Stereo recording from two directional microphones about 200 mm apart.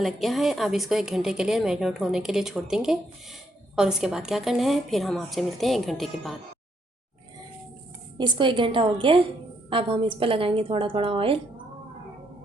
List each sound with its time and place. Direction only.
0.0 s a woman's voice: centre (ahead or behind)
8.2 s a woman's voice: 25° right (ahead or behind)